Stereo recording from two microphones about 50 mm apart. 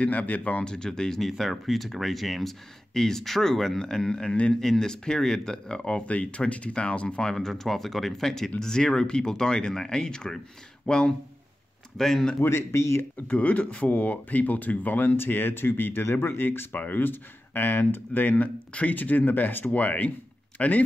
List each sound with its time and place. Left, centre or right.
0.0 s speech: left
0.7 s speech: centre
12.4 s speech: left
13.3 s speech: left